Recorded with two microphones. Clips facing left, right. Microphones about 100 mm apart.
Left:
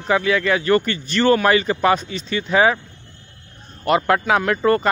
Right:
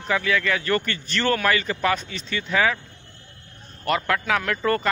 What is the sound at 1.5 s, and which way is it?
Speech, 25° left (ahead or behind).